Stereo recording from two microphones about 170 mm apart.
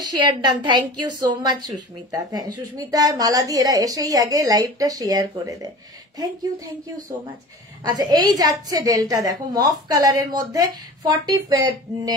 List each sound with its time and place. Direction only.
0.2 s a woman's voice: 25° right (ahead or behind)
7.8 s a woman's voice: 25° right (ahead or behind)